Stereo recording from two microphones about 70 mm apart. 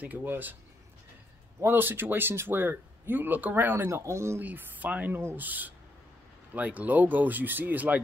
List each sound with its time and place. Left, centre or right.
0.0 s speech: right
1.6 s speech: right
4.4 s speech: right